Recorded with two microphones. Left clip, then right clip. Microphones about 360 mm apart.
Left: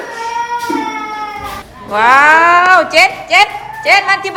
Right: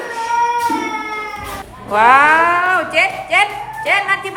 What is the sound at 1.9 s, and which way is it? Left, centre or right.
A woman's voice, centre.